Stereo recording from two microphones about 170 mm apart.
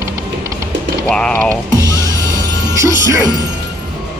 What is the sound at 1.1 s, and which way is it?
Speech, 5° left (ahead or behind).